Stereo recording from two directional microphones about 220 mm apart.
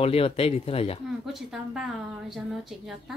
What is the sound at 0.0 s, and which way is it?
Speech, 25° left (ahead or behind).